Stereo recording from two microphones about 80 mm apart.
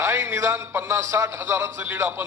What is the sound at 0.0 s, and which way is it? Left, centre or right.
A man's voice, right.